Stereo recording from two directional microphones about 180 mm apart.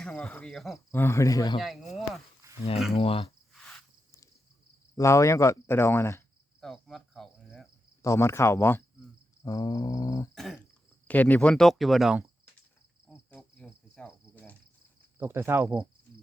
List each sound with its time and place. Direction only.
0.0 s speech: 5° left (ahead or behind)
0.9 s speech: 15° left (ahead or behind)
1.5 s a sound: centre (ahead or behind)
2.9 s speech: 30° left (ahead or behind)
4.9 s speech: 15° left (ahead or behind)
6.6 s cricket: centre (ahead or behind)
8.0 s speech: 15° left (ahead or behind)
9.4 s cat: 20° left (ahead or behind)
10.3 s cricket: centre (ahead or behind)
11.1 s speech: 10° left (ahead or behind)
13.1 s cricket: 5° left (ahead or behind)
15.2 s cricket: 15° right (ahead or behind)